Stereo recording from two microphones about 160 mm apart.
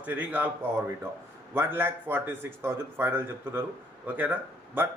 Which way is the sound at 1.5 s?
15° right (ahead or behind).